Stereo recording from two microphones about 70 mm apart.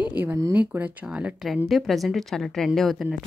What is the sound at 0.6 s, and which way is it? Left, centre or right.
Speech, right.